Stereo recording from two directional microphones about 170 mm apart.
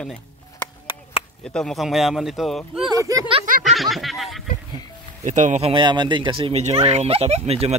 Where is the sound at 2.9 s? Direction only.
20° right (ahead or behind).